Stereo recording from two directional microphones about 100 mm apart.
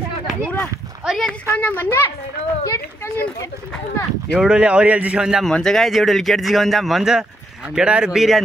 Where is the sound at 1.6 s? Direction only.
20° left (ahead or behind).